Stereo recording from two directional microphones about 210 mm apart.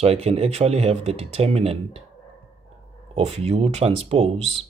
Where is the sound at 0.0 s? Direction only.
30° right (ahead or behind).